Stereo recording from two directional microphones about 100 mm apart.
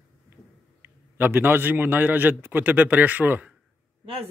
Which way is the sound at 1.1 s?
20° right (ahead or behind).